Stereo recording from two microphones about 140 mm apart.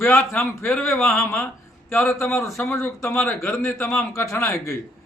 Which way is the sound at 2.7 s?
20° left (ahead or behind).